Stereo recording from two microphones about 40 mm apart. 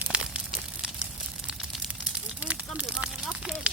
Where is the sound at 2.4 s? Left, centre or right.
Right.